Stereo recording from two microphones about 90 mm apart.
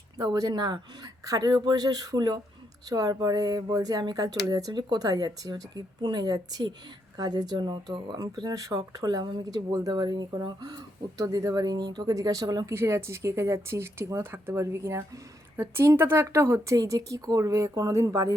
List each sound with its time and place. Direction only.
0.2 s speech: 45° right (ahead or behind)
12.7 s speech: 30° right (ahead or behind)
14.2 s speech: 25° right (ahead or behind)